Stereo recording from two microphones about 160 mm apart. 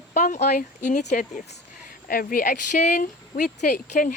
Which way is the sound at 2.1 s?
60° left (ahead or behind).